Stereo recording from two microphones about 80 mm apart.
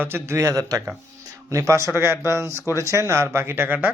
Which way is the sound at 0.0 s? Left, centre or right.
Right.